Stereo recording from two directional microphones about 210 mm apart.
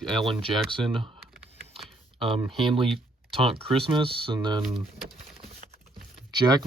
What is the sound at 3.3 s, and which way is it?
Speech, 25° right (ahead or behind).